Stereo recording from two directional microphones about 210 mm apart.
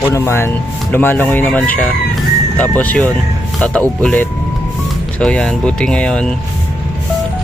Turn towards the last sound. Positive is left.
turn(degrees=5)  # may be behind; listen again after turning